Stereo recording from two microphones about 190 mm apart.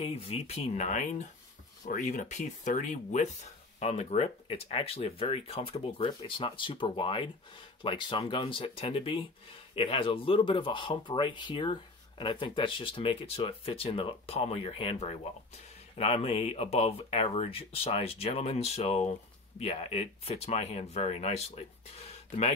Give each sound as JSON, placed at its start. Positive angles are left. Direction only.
{"t": 0.0, "sound": "speech", "side_deg": 30}